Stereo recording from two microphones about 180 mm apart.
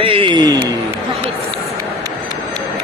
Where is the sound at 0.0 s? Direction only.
30° right (ahead or behind).